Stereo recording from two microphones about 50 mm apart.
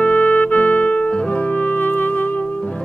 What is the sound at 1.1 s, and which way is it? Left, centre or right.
Music, centre.